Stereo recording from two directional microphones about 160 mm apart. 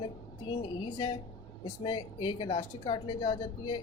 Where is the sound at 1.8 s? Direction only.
30° left (ahead or behind).